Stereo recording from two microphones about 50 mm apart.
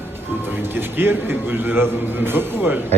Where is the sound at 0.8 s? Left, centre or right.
Right.